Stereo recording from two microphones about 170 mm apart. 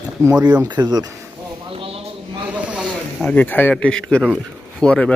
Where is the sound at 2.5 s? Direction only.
5° right (ahead or behind).